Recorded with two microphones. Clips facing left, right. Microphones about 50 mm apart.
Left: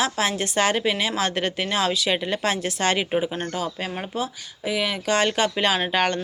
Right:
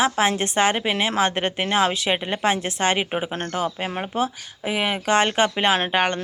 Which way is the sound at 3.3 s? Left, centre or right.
Right.